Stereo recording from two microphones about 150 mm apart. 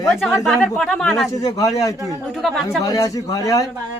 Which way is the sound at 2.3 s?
Centre (ahead or behind).